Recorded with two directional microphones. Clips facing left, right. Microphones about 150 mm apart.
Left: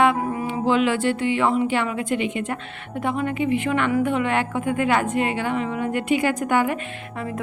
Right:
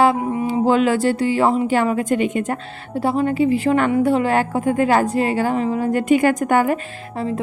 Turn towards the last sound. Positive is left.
turn(degrees=-40)  # may be behind; listen again after turning